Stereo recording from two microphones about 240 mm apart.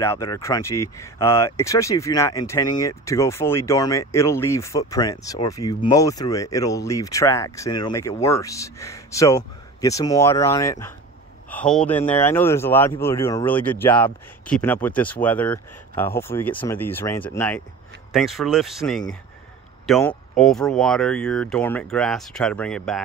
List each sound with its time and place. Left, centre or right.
0.0 s speech: centre